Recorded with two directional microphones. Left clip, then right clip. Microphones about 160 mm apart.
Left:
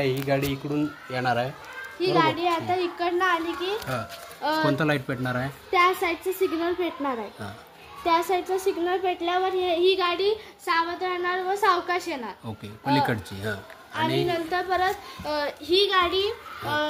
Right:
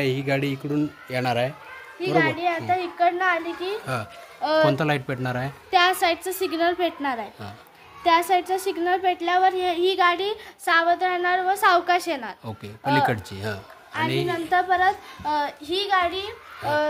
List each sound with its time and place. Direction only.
0.0 s a woman's voice: 55° right (ahead or behind)
2.0 s a child's voice: 30° right (ahead or behind)
4.4 s speech: 60° right (ahead or behind)
4.7 s speech: 30° right (ahead or behind)
5.7 s a child's voice: 45° right (ahead or behind); by 12.4 s 65° right (ahead or behind)
12.4 s a child's voice: 25° right (ahead or behind); by 14.9 s 45° right (ahead or behind)
15.2 s a child's voice: 55° right (ahead or behind)